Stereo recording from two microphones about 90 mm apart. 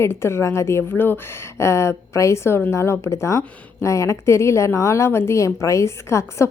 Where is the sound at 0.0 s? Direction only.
30° left (ahead or behind).